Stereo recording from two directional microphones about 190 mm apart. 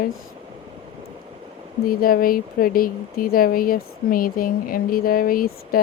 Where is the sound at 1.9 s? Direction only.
50° left (ahead or behind).